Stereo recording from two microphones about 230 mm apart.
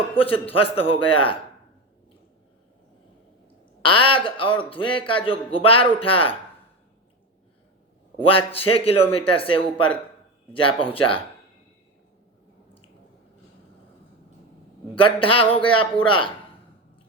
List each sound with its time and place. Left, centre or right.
0.2 s a man's voice: left
3.8 s a man's voice: left
8.2 s a man's voice: left
14.9 s a man's voice: left